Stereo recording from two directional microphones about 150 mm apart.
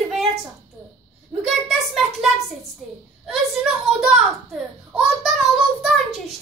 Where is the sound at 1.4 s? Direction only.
Centre (ahead or behind).